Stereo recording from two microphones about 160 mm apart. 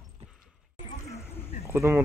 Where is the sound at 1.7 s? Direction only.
15° right (ahead or behind).